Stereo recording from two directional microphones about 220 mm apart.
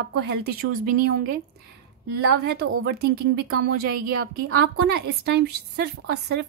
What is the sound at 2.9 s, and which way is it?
A woman's voice, 45° right (ahead or behind).